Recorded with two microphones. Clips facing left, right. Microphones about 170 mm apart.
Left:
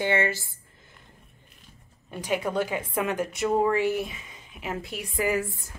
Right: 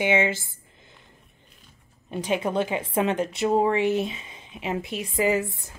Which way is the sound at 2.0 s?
20° right (ahead or behind).